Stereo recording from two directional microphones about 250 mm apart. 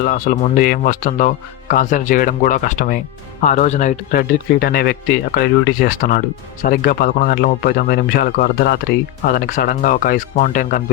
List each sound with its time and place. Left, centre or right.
0.1 s speech: left